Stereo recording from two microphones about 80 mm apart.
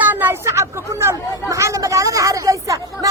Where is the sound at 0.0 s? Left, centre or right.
Right.